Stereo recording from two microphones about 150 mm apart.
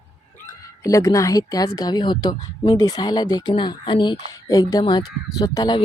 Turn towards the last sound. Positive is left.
turn(degrees=25)  # may be behind; listen again after turning